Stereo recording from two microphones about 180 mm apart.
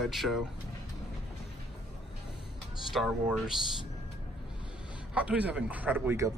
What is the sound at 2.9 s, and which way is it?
Speech, centre (ahead or behind).